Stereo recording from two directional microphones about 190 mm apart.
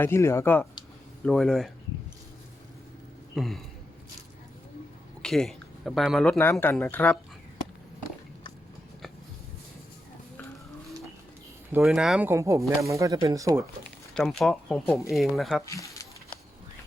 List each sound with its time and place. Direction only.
0.0 s speech: 15° left (ahead or behind)
3.3 s speech: centre (ahead or behind)
5.2 s speech: centre (ahead or behind)
11.7 s speech: 5° right (ahead or behind)
12.3 s speech: 15° right (ahead or behind)
14.1 s speech: 5° left (ahead or behind)
15.6 s a sound: 15° left (ahead or behind)